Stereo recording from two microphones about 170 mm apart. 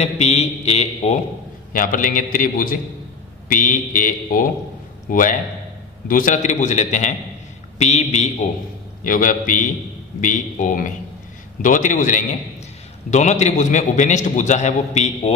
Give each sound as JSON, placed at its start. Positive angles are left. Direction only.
{"t": 0.0, "sound": "mantra", "side_deg": 40}
{"t": 1.7, "sound": "a man's voice", "side_deg": 55}
{"t": 6.0, "sound": "a man's voice", "side_deg": 55}
{"t": 7.8, "sound": "mantra", "side_deg": 40}
{"t": 9.0, "sound": "a man's voice", "side_deg": 50}